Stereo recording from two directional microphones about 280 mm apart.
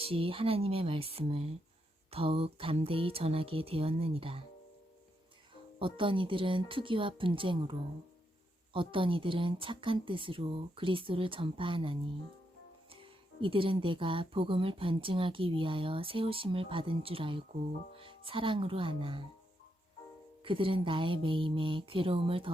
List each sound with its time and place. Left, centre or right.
0.0 s speech: centre
5.8 s speech: centre
20.4 s speech: centre